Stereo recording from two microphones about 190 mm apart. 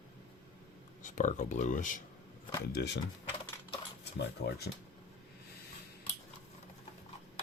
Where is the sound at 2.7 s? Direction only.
60° left (ahead or behind).